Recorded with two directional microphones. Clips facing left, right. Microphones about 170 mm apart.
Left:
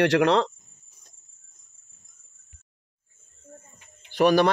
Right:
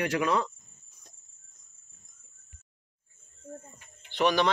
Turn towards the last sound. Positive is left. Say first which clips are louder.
# left 6 dB
turn(degrees=45)  # may be behind; listen again after turning